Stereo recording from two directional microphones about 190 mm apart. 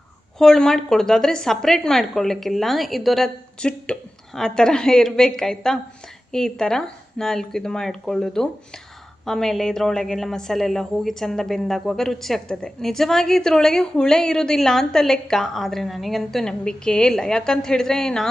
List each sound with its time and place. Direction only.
0.3 s a woman's voice: centre (ahead or behind)